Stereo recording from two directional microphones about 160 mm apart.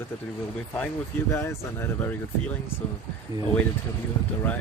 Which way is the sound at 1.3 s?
15° left (ahead or behind).